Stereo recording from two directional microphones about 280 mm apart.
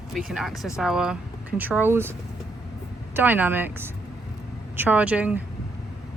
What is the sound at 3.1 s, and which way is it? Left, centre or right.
Speech, centre.